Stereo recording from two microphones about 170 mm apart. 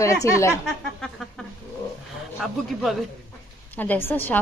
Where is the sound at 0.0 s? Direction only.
20° left (ahead or behind).